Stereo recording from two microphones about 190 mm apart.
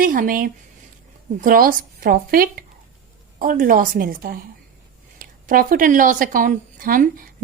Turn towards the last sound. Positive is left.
turn(degrees=-45)  # may be behind; listen again after turning